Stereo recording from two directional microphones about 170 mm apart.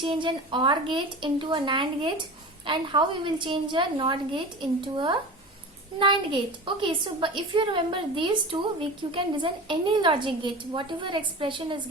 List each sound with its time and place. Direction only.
0.0 s a woman's voice: 30° right (ahead or behind)